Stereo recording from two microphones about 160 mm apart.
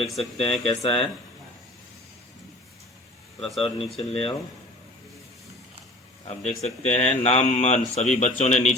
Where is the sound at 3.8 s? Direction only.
Centre (ahead or behind).